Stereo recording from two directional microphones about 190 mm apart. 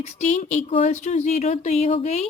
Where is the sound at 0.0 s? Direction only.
40° left (ahead or behind).